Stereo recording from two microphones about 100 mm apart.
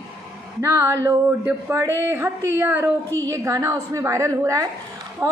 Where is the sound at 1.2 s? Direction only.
20° right (ahead or behind).